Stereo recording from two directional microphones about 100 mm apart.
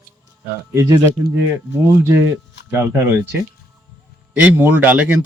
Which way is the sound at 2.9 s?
20° right (ahead or behind).